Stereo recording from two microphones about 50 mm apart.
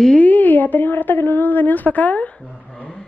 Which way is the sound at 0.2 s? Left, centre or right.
Left.